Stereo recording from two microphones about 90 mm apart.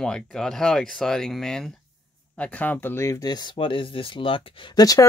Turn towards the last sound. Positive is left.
turn(degrees=45)  # may be behind; listen again after turning